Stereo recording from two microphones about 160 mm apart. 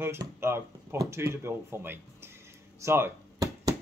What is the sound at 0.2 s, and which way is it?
Speech, 15° right (ahead or behind).